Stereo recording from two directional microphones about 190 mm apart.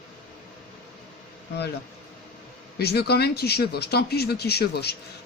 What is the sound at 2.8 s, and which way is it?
Speech, 60° left (ahead or behind).